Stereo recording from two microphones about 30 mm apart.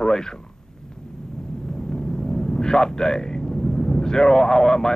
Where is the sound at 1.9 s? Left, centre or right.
Left.